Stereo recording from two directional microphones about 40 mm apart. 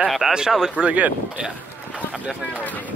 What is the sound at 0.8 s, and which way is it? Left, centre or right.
Speech, right.